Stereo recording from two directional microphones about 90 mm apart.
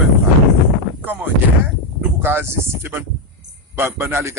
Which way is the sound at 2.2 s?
25° right (ahead or behind).